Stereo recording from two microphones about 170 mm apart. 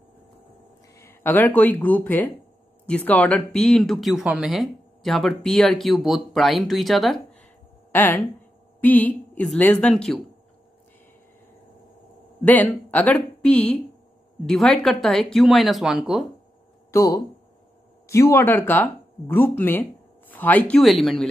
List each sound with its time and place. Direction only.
0.9 s speech: 15° left (ahead or behind)
7.9 s a woman's voice: 10° left (ahead or behind)
12.4 s a woman's voice: 10° left (ahead or behind)
16.9 s speech: 20° left (ahead or behind); by 21.3 s centre (ahead or behind)